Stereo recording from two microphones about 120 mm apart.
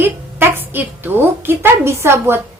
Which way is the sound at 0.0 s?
20° right (ahead or behind).